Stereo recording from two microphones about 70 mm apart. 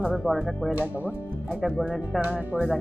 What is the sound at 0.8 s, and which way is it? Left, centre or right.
Speech, right.